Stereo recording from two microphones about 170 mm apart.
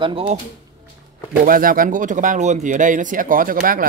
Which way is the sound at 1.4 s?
55° right (ahead or behind).